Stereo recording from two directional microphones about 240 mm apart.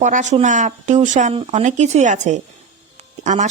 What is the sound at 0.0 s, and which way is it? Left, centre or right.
Speech, right.